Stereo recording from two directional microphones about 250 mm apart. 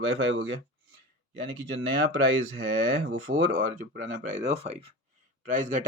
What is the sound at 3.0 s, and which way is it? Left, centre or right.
Speech, right.